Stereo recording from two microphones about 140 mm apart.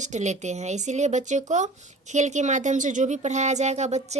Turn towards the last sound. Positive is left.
turn(degrees=-55)  # may be behind; listen again after turning